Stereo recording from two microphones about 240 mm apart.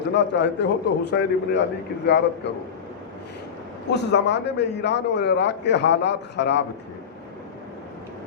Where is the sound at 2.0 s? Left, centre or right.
Left.